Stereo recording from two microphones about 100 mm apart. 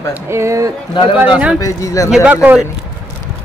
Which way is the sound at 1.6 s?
35° left (ahead or behind).